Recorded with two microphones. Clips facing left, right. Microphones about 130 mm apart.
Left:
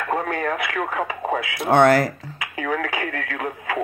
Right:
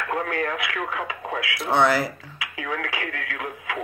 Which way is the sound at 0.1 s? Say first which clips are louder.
Left 3 dB; 45° left (ahead or behind).